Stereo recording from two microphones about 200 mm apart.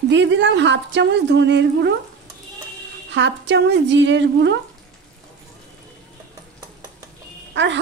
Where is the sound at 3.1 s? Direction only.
65° right (ahead or behind).